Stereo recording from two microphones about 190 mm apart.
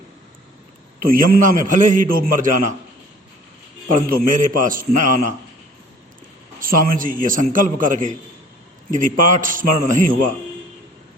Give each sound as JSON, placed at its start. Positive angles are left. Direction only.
{"t": 1.0, "sound": "a man's voice", "side_deg": -50}
{"t": 3.8, "sound": "a man's voice", "side_deg": -45}
{"t": 6.6, "sound": "a man's voice", "side_deg": -45}